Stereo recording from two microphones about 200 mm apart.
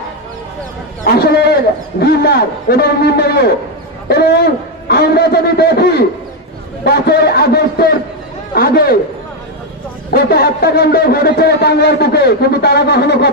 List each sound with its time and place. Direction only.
1.0 s a man's voice: 55° left (ahead or behind)
4.8 s speech: 50° left (ahead or behind)
10.1 s speech: 50° left (ahead or behind)